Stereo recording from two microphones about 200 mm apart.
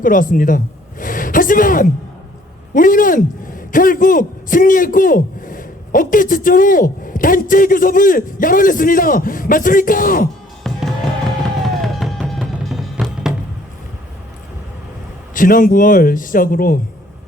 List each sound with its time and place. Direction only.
0.0 s a man's voice: 45° left (ahead or behind)
10.6 s music: centre (ahead or behind)
15.4 s a man's voice: 45° left (ahead or behind)